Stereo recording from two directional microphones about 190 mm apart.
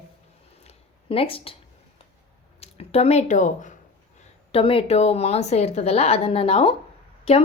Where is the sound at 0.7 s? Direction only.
30° left (ahead or behind).